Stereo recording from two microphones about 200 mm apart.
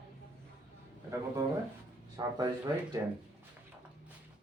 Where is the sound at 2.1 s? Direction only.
20° right (ahead or behind).